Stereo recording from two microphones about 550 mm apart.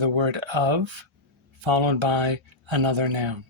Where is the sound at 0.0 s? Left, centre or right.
Right.